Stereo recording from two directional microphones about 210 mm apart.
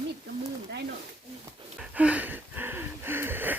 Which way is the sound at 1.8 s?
5° right (ahead or behind).